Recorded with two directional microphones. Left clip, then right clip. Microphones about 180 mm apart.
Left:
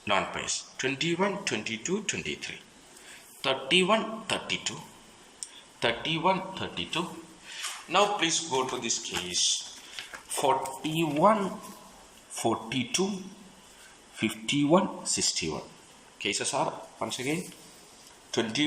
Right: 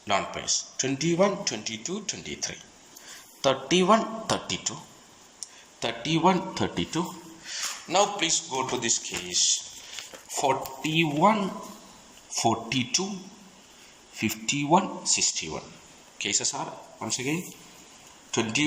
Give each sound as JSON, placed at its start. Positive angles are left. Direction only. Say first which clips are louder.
{"t": 0.0, "sound": "speech", "louder": "right 1 dB", "side_deg": -30}
{"t": 5.8, "sound": "a man's voice", "louder": "right 2 dB", "side_deg": -30}
{"t": 14.2, "sound": "speech", "louder": "even", "side_deg": -20}